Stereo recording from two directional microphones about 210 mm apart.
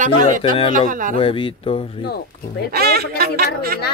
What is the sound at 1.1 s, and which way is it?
Speech, 25° left (ahead or behind).